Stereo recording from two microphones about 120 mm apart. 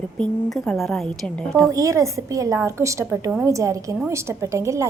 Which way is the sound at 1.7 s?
25° right (ahead or behind).